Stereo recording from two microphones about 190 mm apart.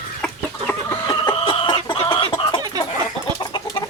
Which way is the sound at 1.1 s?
20° left (ahead or behind).